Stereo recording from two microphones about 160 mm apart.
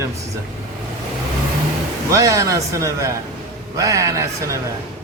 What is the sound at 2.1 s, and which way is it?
Speech, 20° right (ahead or behind).